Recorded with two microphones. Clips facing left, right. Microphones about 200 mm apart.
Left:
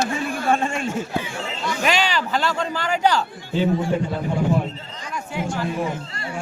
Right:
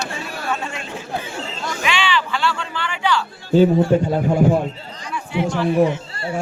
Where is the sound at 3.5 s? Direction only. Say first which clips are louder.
Right 7 dB; 40° right (ahead or behind).